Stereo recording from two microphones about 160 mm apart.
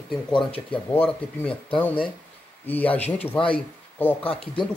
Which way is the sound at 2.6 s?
10° left (ahead or behind).